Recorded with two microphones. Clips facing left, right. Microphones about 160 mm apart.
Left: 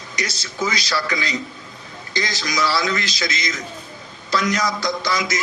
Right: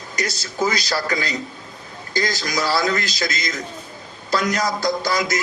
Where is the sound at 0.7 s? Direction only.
50° right (ahead or behind).